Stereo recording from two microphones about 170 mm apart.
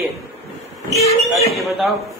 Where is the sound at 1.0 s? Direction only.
40° left (ahead or behind).